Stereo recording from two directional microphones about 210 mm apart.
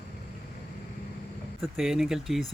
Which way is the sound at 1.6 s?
Centre (ahead or behind).